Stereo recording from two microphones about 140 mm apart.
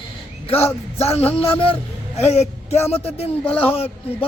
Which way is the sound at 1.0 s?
45° left (ahead or behind).